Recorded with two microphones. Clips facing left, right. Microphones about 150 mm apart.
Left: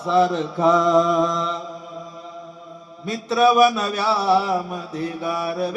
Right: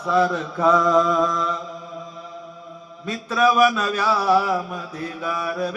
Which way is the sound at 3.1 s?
30° left (ahead or behind).